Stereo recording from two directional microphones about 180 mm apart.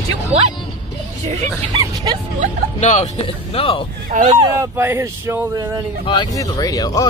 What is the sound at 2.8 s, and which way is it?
Speech, 40° left (ahead or behind).